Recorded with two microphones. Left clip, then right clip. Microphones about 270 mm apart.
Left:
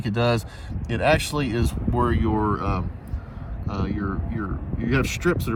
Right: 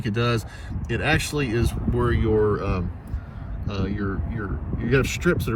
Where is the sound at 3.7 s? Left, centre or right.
Left.